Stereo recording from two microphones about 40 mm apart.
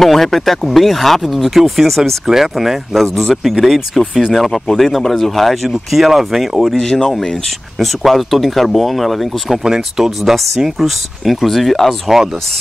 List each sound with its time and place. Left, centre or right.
0.0 s speech: centre
6.8 s speech: centre
9.9 s speech: centre
10.3 s speech: centre
12.1 s speech: centre